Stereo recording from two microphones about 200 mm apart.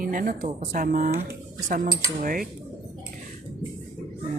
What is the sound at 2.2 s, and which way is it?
Speech, 45° right (ahead or behind).